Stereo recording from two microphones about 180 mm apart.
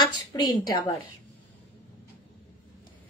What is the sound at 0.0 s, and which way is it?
Speech, 25° left (ahead or behind).